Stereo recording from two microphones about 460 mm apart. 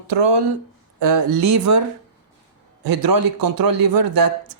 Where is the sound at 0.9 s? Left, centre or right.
Right.